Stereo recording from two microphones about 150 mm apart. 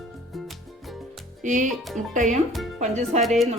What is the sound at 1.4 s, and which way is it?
Speech, 55° right (ahead or behind).